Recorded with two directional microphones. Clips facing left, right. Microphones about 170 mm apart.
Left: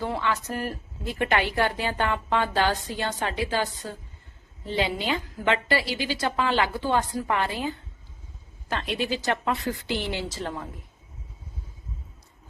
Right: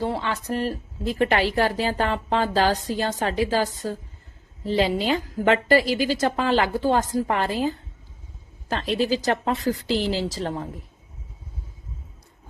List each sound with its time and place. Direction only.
0.0 s a woman's voice: 30° right (ahead or behind)